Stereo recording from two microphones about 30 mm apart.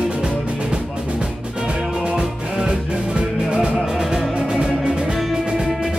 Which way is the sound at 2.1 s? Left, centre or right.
Centre.